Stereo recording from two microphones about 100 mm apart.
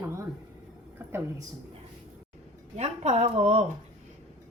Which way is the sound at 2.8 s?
90° right.